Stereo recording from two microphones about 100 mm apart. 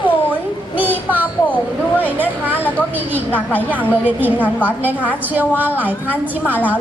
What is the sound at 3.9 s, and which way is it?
Speech, 15° right (ahead or behind).